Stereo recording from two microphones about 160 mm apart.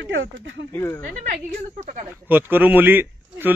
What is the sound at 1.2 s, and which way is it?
Speech, 55° right (ahead or behind).